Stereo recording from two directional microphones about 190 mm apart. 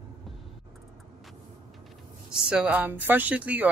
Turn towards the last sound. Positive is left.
turn(degrees=-10)  # may be behind; listen again after turning